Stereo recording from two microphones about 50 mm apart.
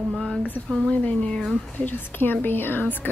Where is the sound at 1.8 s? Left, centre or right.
Left.